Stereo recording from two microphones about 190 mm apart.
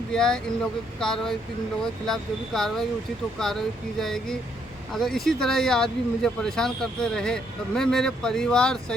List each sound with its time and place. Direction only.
0.1 s speech: 5° left (ahead or behind)